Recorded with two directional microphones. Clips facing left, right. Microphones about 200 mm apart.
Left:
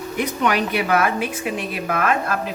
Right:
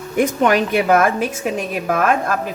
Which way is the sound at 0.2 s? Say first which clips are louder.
Right 6 dB; 45° right (ahead or behind).